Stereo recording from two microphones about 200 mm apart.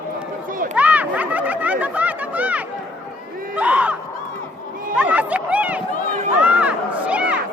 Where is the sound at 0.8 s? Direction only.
5° right (ahead or behind).